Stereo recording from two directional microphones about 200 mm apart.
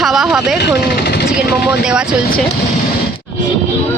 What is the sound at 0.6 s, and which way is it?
Speech, 55° left (ahead or behind).